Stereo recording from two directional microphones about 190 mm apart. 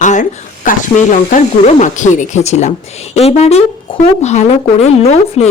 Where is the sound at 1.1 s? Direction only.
40° left (ahead or behind).